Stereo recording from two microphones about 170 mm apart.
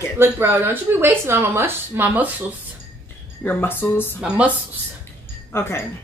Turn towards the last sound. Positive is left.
turn(degrees=15)  # may be behind; listen again after turning